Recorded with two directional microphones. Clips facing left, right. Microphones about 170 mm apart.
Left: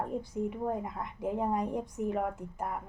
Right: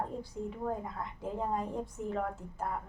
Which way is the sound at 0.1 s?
15° left (ahead or behind).